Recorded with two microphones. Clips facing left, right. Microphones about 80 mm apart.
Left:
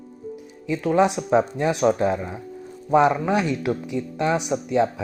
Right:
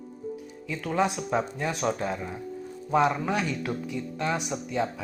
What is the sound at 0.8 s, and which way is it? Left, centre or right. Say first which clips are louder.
Speech: left 7 dB; left.